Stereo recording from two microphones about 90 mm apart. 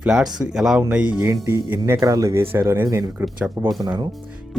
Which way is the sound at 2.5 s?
25° right (ahead or behind).